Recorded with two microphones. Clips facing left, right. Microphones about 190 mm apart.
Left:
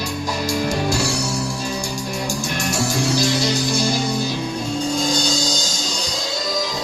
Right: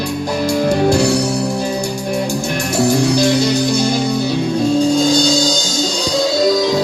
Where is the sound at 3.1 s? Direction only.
60° right (ahead or behind).